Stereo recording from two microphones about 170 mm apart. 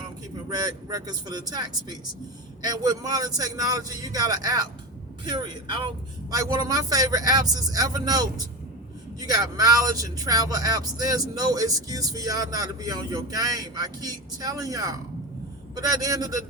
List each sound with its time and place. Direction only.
0.4 s speech: 20° right (ahead or behind)